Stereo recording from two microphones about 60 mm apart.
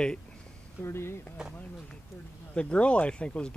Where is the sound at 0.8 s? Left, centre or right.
Left.